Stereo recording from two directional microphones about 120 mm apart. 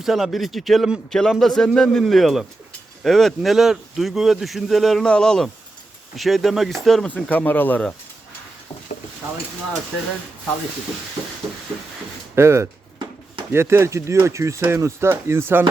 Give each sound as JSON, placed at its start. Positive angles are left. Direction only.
{"t": 0.0, "sound": "speech", "side_deg": 0}
{"t": 11.4, "sound": "a sound", "side_deg": 0}
{"t": 12.4, "sound": "speech", "side_deg": -20}